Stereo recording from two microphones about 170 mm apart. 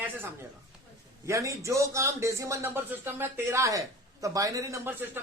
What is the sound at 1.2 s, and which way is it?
A man's voice, 20° right (ahead or behind).